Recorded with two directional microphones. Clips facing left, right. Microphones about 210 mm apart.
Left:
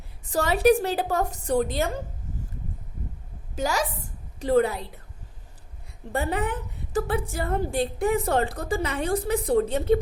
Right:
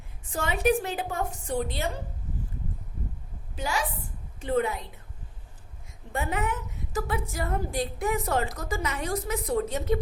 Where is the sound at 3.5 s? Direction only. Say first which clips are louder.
Left 4 dB; 45° left (ahead or behind).